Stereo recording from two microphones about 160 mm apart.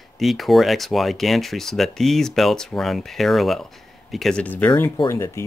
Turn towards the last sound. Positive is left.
turn(degrees=15)  # may be behind; listen again after turning